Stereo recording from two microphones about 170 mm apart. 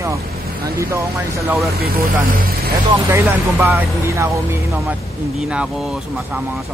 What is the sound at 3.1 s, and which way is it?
Speech, 15° right (ahead or behind).